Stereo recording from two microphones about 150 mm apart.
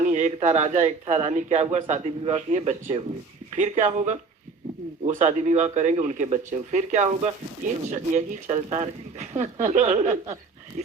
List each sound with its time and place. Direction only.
0.0 s speech: 50° right (ahead or behind)